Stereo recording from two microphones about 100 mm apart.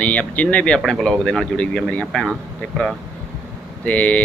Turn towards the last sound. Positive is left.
turn(degrees=15)  # may be behind; listen again after turning